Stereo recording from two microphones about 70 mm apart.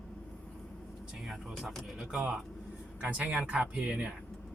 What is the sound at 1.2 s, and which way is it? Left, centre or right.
Speech, centre.